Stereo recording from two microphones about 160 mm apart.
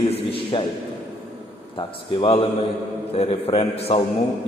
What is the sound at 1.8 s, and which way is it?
A man's voice, 35° left (ahead or behind).